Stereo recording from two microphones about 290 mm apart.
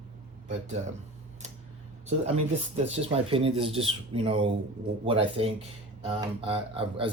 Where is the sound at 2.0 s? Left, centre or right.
Right.